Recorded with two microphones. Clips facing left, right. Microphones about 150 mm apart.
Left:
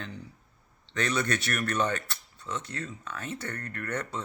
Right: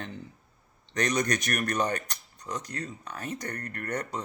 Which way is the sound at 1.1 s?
40° right (ahead or behind).